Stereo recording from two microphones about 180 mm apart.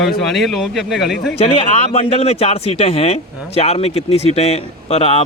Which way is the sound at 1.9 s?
35° left (ahead or behind).